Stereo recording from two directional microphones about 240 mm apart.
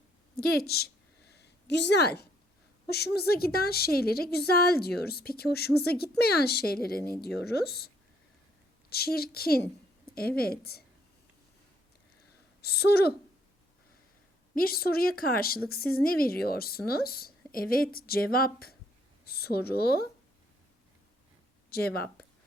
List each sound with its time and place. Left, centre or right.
1.3 s a sound: left
2.9 s a woman's voice: left
8.9 s a woman's voice: left
12.6 s a woman's voice: left
14.5 s a woman's voice: left
21.7 s speech: left